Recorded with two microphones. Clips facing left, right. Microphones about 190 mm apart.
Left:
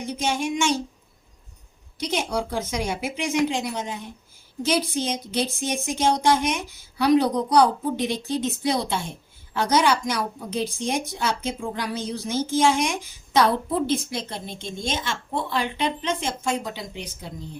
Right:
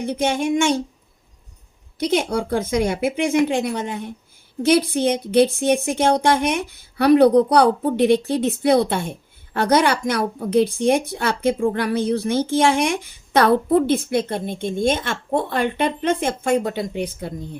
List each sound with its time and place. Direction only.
0.0 s speech: 60° right (ahead or behind)
2.0 s speech: 55° right (ahead or behind)